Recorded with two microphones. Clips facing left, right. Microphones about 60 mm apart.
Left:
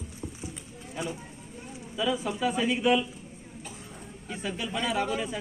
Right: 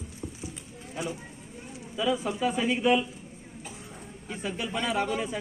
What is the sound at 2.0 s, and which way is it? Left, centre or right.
Speech, right.